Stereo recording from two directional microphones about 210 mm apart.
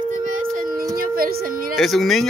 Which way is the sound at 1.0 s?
45° right (ahead or behind).